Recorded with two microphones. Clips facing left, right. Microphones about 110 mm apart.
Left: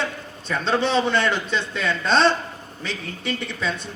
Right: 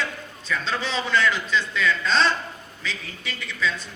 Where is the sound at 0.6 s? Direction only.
60° left (ahead or behind).